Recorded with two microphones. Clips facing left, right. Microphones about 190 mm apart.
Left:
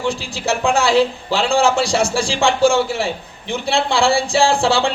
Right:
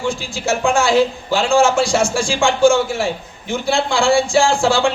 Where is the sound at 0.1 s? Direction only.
35° left (ahead or behind).